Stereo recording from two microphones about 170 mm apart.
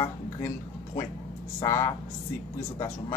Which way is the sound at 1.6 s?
15° left (ahead or behind).